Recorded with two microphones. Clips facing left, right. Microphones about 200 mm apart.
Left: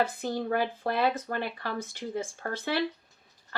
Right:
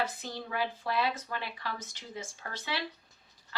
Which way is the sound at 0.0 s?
55° left (ahead or behind).